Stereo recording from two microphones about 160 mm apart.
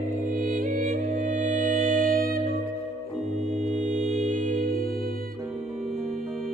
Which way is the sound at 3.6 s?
45° right (ahead or behind).